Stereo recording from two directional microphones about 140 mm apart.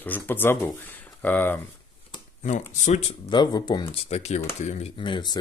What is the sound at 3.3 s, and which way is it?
Speech, 30° left (ahead or behind).